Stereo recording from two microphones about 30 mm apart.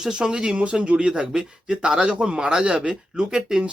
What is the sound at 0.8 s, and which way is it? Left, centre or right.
Speech, right.